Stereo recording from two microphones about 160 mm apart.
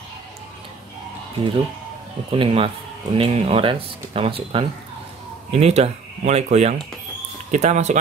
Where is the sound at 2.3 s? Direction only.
35° right (ahead or behind).